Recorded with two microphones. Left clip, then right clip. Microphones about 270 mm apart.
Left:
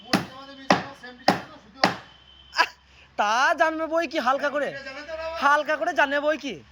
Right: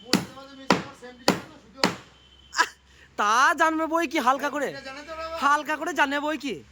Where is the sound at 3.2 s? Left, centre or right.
Centre.